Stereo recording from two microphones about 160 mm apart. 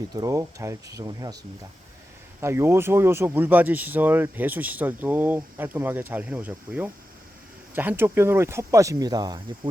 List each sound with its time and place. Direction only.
0.1 s speech: 20° right (ahead or behind)
2.4 s speech: 15° right (ahead or behind)